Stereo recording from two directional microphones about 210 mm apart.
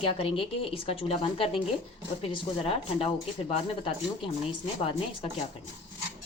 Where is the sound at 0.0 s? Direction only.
25° left (ahead or behind).